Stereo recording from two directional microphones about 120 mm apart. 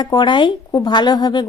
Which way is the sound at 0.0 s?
35° left (ahead or behind).